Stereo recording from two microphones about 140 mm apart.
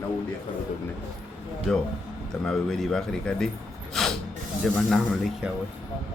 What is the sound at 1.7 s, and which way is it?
Speech, 5° left (ahead or behind).